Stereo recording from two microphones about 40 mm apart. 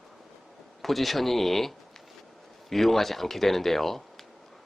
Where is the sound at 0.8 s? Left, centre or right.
Centre.